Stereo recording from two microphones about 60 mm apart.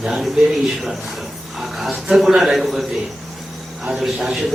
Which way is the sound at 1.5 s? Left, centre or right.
Centre.